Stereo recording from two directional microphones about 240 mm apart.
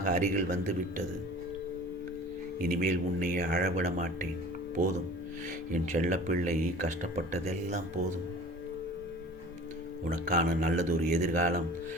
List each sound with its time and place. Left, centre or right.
0.0 s speech: right
2.6 s speech: right
5.7 s speech: right
10.0 s speech: right